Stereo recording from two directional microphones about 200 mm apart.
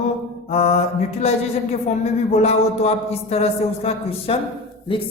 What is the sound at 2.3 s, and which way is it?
Speech, 30° left (ahead or behind).